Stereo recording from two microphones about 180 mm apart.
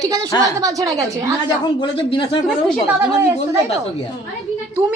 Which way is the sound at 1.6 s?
25° left (ahead or behind).